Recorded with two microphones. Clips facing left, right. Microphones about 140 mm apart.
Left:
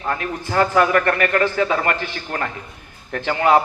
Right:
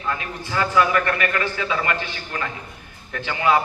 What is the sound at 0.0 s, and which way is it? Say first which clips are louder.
A man's voice: left 4 dB; 45° left (ahead or behind).